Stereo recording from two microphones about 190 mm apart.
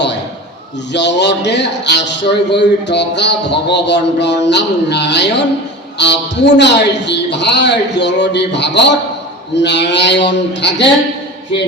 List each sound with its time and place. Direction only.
0.9 s a man's voice: 65° left (ahead or behind)